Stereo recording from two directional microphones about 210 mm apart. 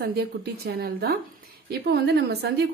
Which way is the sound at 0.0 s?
50° right (ahead or behind).